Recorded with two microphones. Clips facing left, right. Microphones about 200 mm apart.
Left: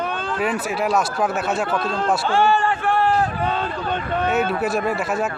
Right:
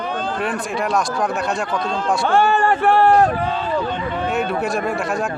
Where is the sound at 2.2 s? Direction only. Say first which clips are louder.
Right 3 dB; 55° right (ahead or behind).